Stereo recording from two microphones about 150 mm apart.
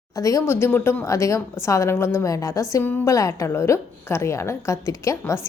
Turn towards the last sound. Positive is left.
turn(degrees=20)  # may be behind; listen again after turning